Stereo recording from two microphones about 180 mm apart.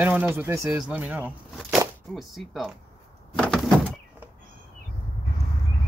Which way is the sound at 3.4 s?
Centre (ahead or behind).